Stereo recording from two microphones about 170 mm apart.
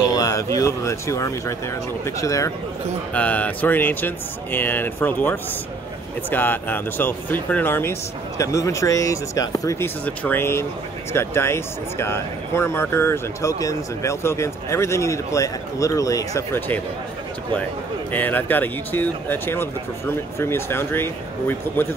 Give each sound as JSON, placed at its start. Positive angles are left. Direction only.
{"t": 0.1, "sound": "speech", "side_deg": 20}
{"t": 18.1, "sound": "speech", "side_deg": 10}